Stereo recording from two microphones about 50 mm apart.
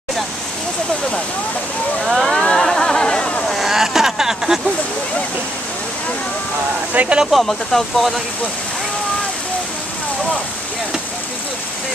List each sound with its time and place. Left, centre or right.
2.0 s a sound: centre
3.4 s vehicle: centre
6.9 s speech: right
7.4 s speech: centre